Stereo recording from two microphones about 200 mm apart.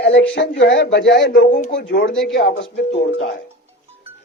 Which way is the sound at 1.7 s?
60° left (ahead or behind).